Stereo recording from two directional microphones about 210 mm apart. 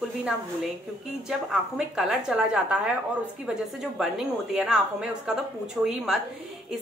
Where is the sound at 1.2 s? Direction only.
5° right (ahead or behind).